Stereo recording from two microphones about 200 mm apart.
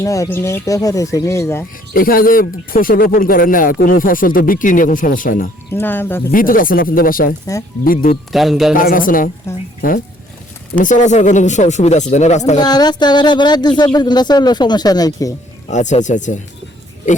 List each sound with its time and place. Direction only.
0.0 s speech: 15° left (ahead or behind)
1.9 s speech: 45° left (ahead or behind)
5.7 s speech: 10° left (ahead or behind)
6.3 s speech: 45° left (ahead or behind)
7.5 s speech: 15° left (ahead or behind)
7.9 s speech: 45° left (ahead or behind)
8.3 s speech: centre (ahead or behind)
8.7 s speech: 45° left (ahead or behind)
10.8 s speech: 40° left (ahead or behind)
12.5 s speech: 20° left (ahead or behind)
15.7 s speech: 35° left (ahead or behind)